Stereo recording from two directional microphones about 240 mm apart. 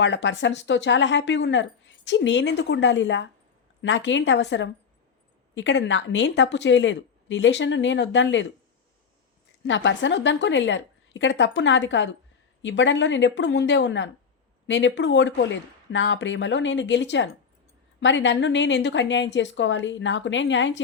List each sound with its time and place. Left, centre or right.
0.0 s speech: left
9.6 s speech: left